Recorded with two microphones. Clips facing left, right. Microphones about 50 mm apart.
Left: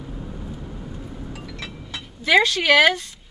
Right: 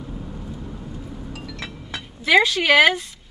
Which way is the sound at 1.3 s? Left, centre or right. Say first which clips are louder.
Right 1 dB; centre.